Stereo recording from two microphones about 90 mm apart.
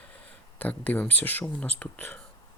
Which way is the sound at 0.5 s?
20° left (ahead or behind).